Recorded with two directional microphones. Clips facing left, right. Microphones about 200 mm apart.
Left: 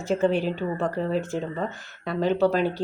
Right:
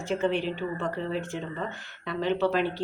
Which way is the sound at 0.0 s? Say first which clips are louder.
Left 4 dB; 40° left (ahead or behind).